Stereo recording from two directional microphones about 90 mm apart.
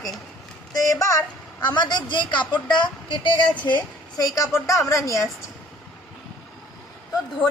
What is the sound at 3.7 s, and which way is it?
A woman's voice, 45° left (ahead or behind).